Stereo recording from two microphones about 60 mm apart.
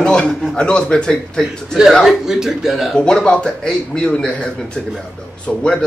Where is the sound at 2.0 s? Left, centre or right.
Centre.